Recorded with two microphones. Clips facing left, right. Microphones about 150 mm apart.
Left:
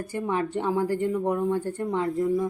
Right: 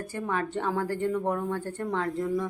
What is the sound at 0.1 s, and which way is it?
Speech, 15° left (ahead or behind).